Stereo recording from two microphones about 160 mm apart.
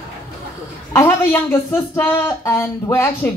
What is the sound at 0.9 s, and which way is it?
Speech, 15° left (ahead or behind).